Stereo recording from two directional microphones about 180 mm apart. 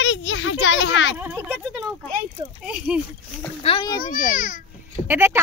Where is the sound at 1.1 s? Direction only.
10° right (ahead or behind).